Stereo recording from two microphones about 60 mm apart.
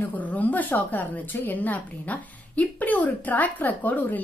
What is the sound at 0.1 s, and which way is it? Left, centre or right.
Speech, left.